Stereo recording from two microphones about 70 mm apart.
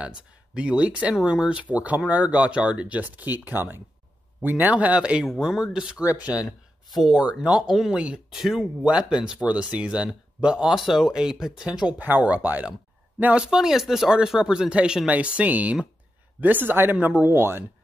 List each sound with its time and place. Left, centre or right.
0.6 s speech: centre
6.9 s speech: centre
8.3 s speech: centre
12.0 s speech: right
13.3 s speech: centre; by 17.6 s right